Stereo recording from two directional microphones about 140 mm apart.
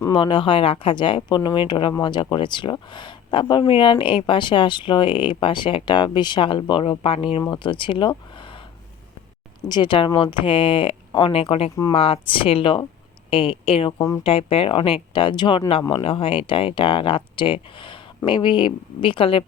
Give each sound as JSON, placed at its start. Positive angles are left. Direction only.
{"t": 0.1, "sound": "speech", "side_deg": 35}
{"t": 9.6, "sound": "speech", "side_deg": 35}